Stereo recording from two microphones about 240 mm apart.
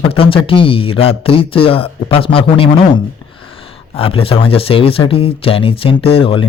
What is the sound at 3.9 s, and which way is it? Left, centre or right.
Speech, left.